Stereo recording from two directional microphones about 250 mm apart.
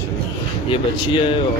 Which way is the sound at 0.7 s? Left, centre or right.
Left.